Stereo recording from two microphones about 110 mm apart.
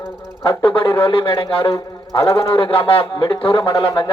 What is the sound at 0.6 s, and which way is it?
A man's voice, 50° left (ahead or behind).